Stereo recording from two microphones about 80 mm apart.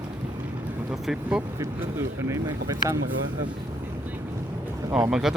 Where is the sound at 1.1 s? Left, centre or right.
Centre.